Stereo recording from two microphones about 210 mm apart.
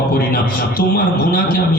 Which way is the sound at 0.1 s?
45° left (ahead or behind).